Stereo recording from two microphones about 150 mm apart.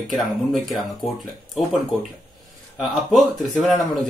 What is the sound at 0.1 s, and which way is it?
Speech, centre (ahead or behind).